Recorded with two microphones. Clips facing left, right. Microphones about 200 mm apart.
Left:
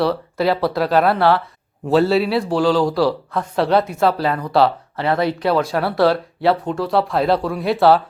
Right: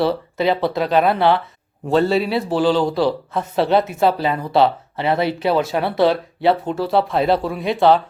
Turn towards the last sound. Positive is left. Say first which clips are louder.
# left 1 dB
turn(degrees=5)  # may be behind; listen again after turning